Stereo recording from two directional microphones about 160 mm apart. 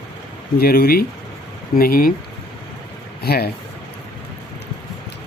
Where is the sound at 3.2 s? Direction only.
80° left.